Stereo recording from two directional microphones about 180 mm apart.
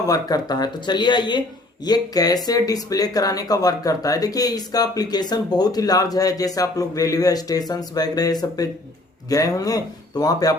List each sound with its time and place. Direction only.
0.0 s speech: 20° left (ahead or behind)